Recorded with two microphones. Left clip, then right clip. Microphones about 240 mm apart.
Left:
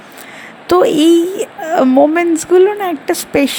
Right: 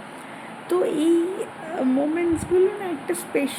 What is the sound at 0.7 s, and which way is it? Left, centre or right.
Speech, left.